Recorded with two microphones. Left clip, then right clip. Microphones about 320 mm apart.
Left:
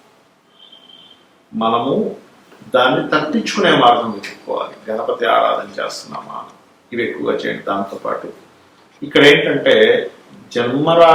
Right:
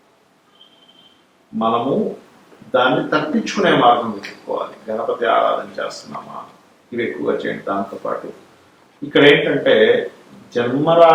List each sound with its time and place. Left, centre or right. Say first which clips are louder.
1.8 s a man's voice: left 2 dB; right
2.7 s speech: left 2 dB; centre
4.4 s speech: left 2 dB; right
5.2 s speech: left 2 dB; centre
6.9 s speech: left 1 dB; centre